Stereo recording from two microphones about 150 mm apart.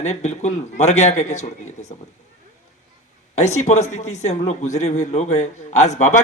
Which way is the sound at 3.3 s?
50° left (ahead or behind).